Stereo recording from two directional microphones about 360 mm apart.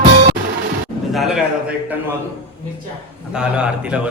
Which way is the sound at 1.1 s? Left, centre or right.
Centre.